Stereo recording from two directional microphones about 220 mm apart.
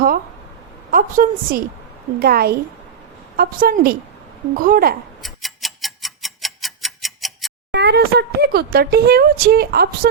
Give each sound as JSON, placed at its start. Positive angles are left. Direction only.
{"t": 0.9, "sound": "a woman's voice", "side_deg": -40}
{"t": 5.2, "sound": "tick-tock", "side_deg": 0}
{"t": 7.7, "sound": "speech", "side_deg": -50}